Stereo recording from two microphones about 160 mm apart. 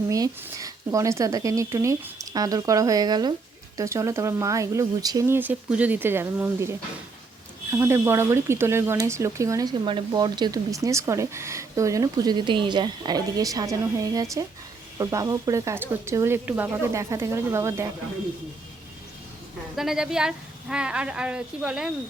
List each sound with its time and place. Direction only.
0.1 s speech: 20° right (ahead or behind)
19.7 s speech: centre (ahead or behind)